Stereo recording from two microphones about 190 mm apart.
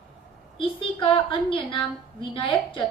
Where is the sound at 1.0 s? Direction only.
25° left (ahead or behind).